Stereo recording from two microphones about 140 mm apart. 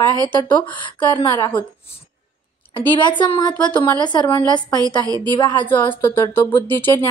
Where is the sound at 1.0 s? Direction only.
35° left (ahead or behind).